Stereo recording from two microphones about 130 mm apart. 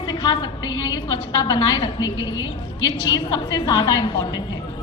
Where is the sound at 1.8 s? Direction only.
30° left (ahead or behind).